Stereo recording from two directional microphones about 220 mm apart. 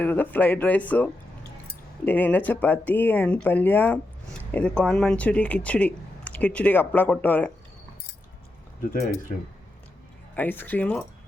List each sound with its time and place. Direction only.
0.0 s speech: 10° left (ahead or behind)
9.3 s speech: 40° left (ahead or behind)
10.3 s speech: 10° left (ahead or behind)